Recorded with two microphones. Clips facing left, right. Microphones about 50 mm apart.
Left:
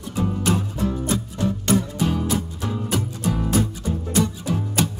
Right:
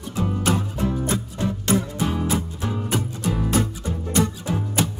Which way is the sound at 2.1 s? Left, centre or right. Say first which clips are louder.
Right 1 dB; centre.